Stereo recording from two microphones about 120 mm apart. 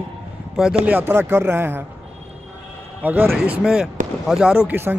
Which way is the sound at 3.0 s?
15° right (ahead or behind).